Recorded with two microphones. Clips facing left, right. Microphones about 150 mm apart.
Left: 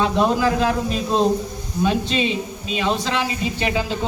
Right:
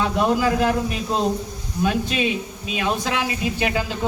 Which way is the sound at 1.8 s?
5° right (ahead or behind).